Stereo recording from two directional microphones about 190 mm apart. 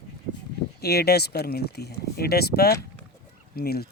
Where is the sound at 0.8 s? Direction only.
55° left (ahead or behind).